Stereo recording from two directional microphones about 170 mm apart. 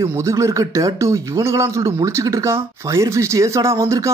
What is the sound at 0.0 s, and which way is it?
Speech, 15° right (ahead or behind).